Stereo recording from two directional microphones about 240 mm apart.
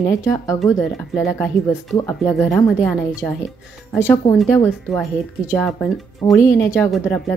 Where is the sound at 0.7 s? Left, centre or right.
Centre.